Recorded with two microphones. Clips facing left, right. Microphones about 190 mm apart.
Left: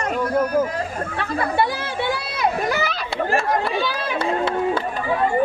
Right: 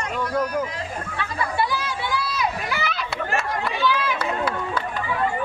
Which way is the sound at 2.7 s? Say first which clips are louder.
Left 4 dB; 40° left (ahead or behind).